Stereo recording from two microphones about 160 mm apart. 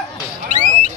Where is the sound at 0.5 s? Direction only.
50° right (ahead or behind).